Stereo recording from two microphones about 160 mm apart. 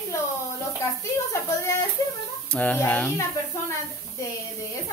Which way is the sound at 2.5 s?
10° left (ahead or behind).